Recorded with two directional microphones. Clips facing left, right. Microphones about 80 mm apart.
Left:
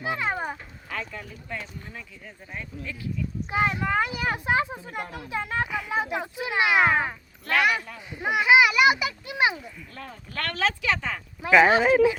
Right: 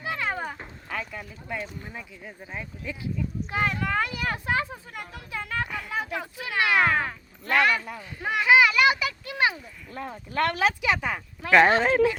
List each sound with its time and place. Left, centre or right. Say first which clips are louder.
0.0 s cat: left 2 dB; left
0.9 s speech: even; centre
3.5 s speech: left 2 dB; centre
5.6 s speech: left 3 dB; centre
5.9 s a child's voice: left 3 dB; left
9.9 s speech: right 7 dB; right
11.3 s a child's voice: left 1 dB; centre